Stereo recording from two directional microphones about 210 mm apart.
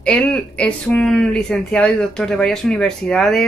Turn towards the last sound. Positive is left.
turn(degrees=0)  # may be behind; listen again after turning